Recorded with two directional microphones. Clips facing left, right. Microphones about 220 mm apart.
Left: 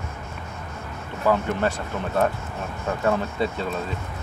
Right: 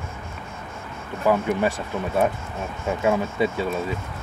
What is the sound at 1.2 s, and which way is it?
Speech, 15° right (ahead or behind).